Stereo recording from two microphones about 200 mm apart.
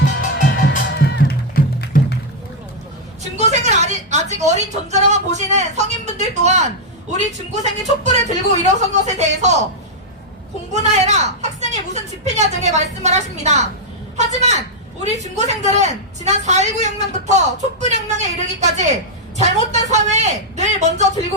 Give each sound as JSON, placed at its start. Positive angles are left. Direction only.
{"t": 0.2, "sound": "music", "side_deg": 40}
{"t": 0.9, "sound": "music", "side_deg": 55}
{"t": 3.3, "sound": "a sound", "side_deg": -35}
{"t": 7.1, "sound": "a woman's voice", "side_deg": -35}
{"t": 10.7, "sound": "a woman's voice", "side_deg": -35}